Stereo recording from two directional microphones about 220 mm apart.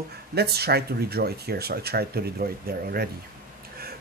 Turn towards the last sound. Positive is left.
turn(degrees=-45)  # may be behind; listen again after turning